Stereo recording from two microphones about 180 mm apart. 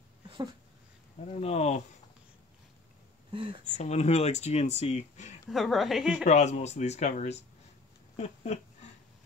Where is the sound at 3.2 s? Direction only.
30° right (ahead or behind).